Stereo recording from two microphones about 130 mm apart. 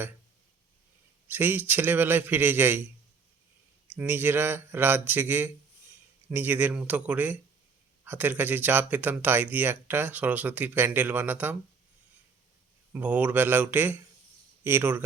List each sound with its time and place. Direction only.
1.3 s speech: 15° right (ahead or behind)
3.9 s speech: 15° right (ahead or behind)
12.9 s speech: 10° right (ahead or behind)